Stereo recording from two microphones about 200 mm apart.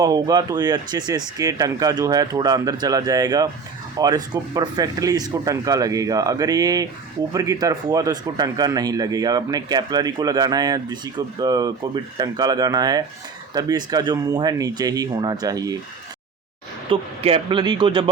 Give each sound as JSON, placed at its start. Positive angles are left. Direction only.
{"t": 0.0, "sound": "speech", "side_deg": -20}
{"t": 16.9, "sound": "speech", "side_deg": -30}